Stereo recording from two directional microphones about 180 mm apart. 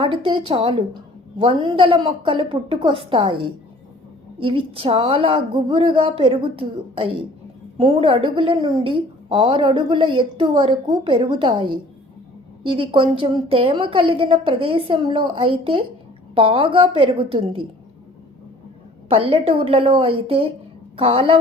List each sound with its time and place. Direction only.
0.0 s a woman's voice: 30° right (ahead or behind)
19.0 s a woman's voice: 35° right (ahead or behind)